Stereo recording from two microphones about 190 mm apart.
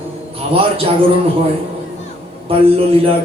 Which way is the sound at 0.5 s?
30° right (ahead or behind).